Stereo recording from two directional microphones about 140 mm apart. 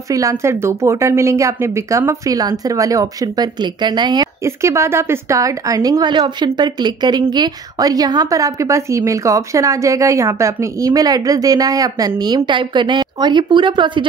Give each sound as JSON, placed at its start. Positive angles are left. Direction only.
{"t": 0.1, "sound": "a woman's voice", "side_deg": -25}
{"t": 4.5, "sound": "a woman's voice", "side_deg": -20}